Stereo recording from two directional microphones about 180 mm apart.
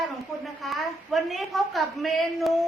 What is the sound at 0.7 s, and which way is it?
Child singing, centre (ahead or behind).